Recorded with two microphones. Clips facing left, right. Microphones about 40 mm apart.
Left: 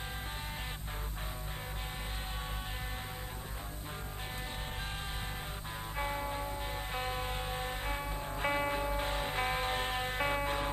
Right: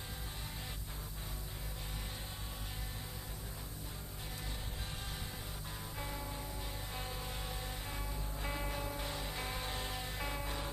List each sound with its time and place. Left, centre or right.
5.9 s music: left